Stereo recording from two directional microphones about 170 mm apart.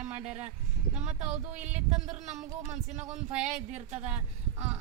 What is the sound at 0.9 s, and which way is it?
Speech, 45° right (ahead or behind).